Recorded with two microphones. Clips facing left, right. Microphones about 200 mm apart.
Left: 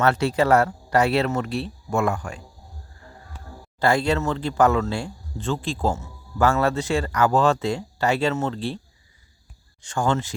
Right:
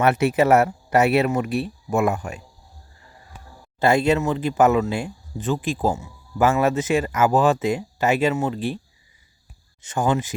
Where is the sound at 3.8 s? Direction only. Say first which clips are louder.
Right 3 dB; 20° right (ahead or behind).